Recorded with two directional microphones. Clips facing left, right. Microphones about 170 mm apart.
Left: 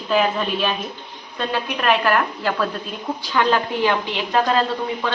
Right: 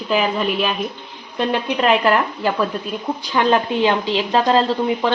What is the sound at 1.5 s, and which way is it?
A woman's voice, 25° right (ahead or behind).